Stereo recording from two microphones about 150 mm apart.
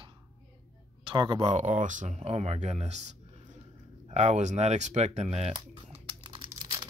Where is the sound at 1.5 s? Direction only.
55° right (ahead or behind).